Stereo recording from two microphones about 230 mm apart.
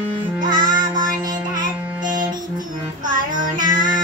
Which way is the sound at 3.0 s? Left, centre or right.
Right.